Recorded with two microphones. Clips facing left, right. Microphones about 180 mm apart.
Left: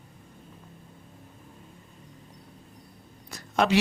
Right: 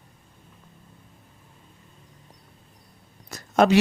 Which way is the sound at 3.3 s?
45° right (ahead or behind).